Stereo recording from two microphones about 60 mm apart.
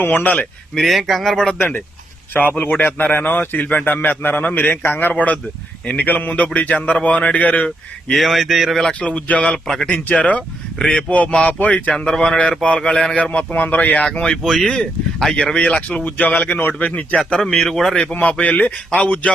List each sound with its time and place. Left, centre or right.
0.0 s speech: left
0.8 s speech: centre
2.6 s a man's voice: left
5.1 s speech: left
8.1 s speech: centre
8.8 s speech: centre
9.6 s speech: centre
9.9 s speech: left
11.9 s speech: centre
13.1 s speech: left
14.0 s speech: centre
17.2 s speech: centre
17.9 s speech: left